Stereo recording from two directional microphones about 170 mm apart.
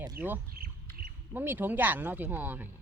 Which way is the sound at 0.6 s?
65° right (ahead or behind).